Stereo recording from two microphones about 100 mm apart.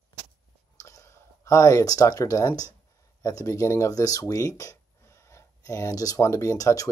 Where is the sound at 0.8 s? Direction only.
30° left (ahead or behind).